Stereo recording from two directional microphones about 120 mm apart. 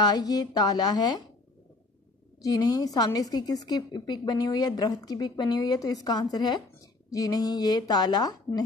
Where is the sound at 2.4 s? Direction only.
30° left (ahead or behind).